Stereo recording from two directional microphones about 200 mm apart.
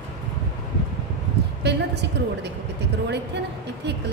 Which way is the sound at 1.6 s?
60° right (ahead or behind).